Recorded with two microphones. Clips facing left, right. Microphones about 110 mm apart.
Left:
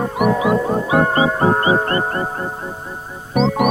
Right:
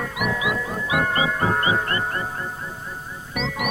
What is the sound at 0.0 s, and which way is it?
Music, 40° left (ahead or behind).